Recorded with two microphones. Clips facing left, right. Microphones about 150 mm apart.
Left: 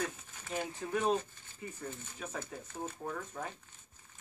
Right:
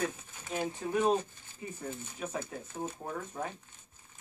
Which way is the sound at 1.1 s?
15° right (ahead or behind).